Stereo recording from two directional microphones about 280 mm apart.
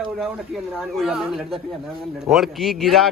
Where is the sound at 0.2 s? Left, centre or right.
Centre.